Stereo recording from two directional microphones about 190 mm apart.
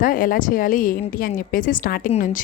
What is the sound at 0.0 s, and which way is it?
A woman's voice, 45° left (ahead or behind).